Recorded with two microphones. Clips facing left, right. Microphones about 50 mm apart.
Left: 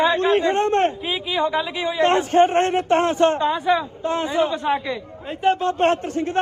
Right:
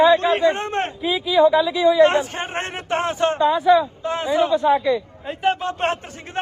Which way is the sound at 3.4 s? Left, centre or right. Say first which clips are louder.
Right 4 dB; left.